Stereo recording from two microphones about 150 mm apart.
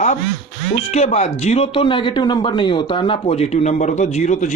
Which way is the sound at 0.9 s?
45° left (ahead or behind).